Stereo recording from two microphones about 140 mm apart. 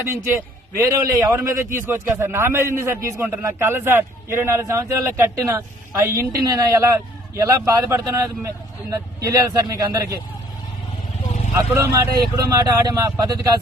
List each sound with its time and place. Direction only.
0.0 s a man's voice: 15° right (ahead or behind)
11.5 s a man's voice: 20° right (ahead or behind)